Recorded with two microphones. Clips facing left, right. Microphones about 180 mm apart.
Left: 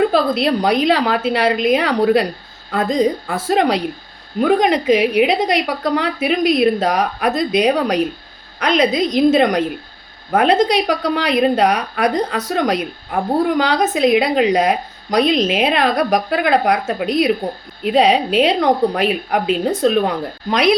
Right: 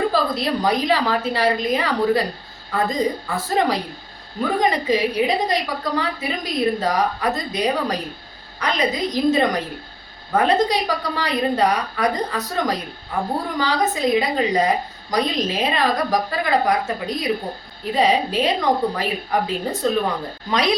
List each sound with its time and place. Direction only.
0.1 s a woman's voice: 70° left (ahead or behind)
20.5 s speech: 65° left (ahead or behind)